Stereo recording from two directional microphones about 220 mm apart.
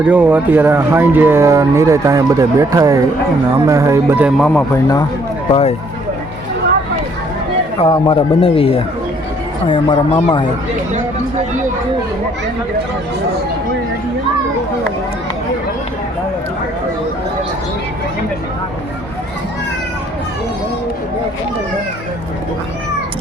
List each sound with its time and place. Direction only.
0.1 s speech: 10° right (ahead or behind)
4.4 s speech: 10° left (ahead or behind)
5.5 s speech: 25° left (ahead or behind)
7.8 s speech: 25° left (ahead or behind)